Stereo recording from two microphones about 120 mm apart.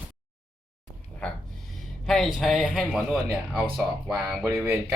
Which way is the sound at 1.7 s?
Centre (ahead or behind).